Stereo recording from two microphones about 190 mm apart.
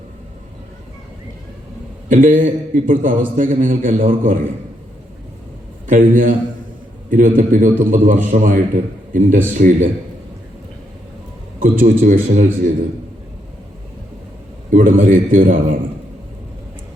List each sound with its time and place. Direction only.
2.0 s a man's voice: 45° right (ahead or behind)
5.9 s a man's voice: 45° right (ahead or behind)
11.6 s a man's voice: 45° right (ahead or behind)
14.7 s a man's voice: 45° right (ahead or behind)